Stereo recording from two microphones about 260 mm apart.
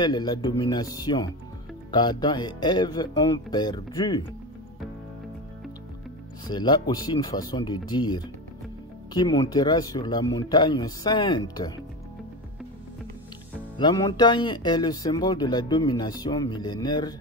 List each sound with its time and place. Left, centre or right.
0.0 s speech: centre
6.4 s speech: centre
13.7 s speech: centre